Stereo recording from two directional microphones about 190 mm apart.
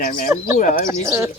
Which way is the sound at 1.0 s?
15° right (ahead or behind).